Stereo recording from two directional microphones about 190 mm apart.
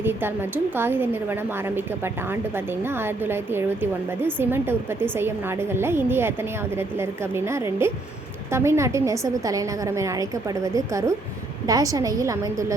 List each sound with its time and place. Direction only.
0.0 s a woman's voice: 10° right (ahead or behind)
2.8 s a woman's voice: 10° right (ahead or behind)